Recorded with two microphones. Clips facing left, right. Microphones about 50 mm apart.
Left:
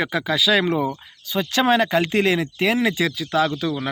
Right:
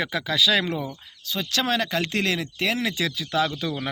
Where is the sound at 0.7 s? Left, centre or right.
Left; by 3.7 s centre.